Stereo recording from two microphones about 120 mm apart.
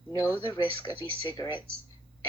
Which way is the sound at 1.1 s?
40° left (ahead or behind).